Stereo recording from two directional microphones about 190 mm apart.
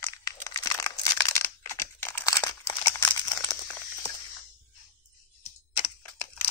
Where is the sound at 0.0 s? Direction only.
15° left (ahead or behind).